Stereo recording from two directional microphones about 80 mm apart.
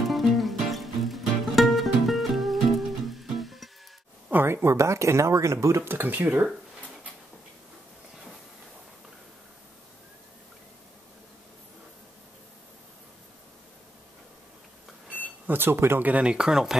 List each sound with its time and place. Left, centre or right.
0.0 s music: centre
4.3 s speech: right
15.4 s speech: right
16.1 s speech: centre